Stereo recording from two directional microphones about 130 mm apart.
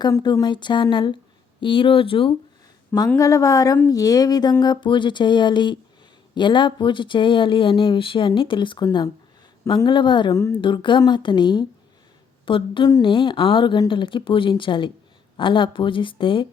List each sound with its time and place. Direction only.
0.4 s speech: 35° left (ahead or behind)
3.2 s speech: 25° left (ahead or behind); by 16.5 s 40° left (ahead or behind)